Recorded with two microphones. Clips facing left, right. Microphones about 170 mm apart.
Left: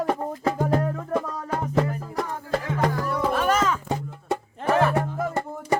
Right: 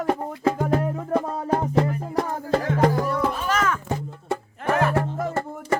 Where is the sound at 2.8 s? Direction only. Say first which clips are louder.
Right 5 dB; 25° right (ahead or behind).